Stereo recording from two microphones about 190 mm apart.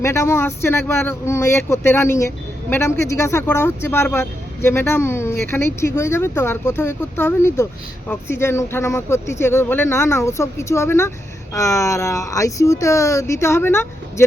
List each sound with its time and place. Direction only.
0.0 s speech: 15° left (ahead or behind)